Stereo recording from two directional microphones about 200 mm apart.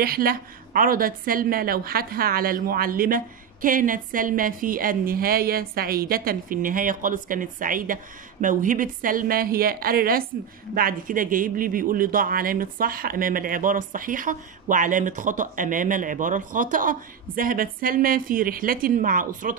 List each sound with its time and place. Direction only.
0.0 s a woman's voice: 50° right (ahead or behind)